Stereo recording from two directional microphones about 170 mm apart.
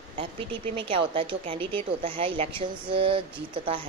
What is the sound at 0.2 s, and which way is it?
A woman's voice, 30° right (ahead or behind).